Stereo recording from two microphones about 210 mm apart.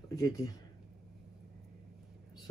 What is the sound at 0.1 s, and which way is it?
Speech, 15° left (ahead or behind).